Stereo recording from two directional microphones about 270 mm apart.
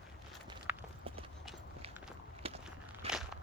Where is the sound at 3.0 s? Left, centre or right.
Right.